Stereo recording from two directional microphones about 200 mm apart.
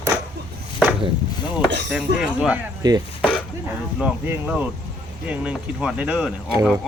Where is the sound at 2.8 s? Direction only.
20° right (ahead or behind).